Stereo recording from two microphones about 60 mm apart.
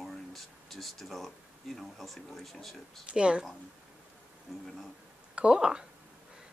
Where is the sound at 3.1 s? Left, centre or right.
Centre.